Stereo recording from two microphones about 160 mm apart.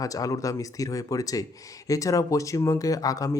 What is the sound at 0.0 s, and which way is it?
Speech, 20° left (ahead or behind).